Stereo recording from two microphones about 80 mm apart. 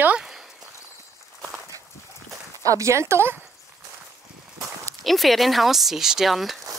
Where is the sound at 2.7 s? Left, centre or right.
Right.